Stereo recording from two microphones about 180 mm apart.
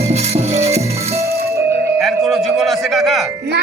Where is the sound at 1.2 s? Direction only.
15° right (ahead or behind).